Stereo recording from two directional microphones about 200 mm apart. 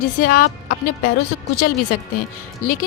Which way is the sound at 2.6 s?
45° left (ahead or behind).